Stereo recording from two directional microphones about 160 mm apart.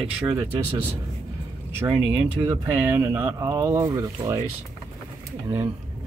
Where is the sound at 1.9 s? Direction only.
35° right (ahead or behind).